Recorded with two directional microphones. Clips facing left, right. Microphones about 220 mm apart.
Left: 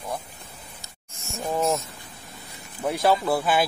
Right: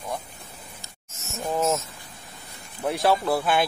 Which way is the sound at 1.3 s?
Centre (ahead or behind).